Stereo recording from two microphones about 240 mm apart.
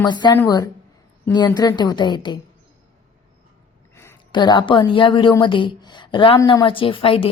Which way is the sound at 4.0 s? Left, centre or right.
Centre.